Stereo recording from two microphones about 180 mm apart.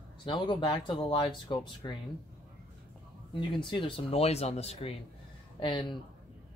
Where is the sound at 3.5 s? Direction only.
25° left (ahead or behind).